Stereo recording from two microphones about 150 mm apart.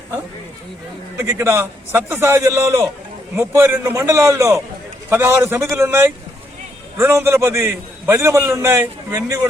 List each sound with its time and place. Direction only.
1.2 s a man's voice: 20° right (ahead or behind)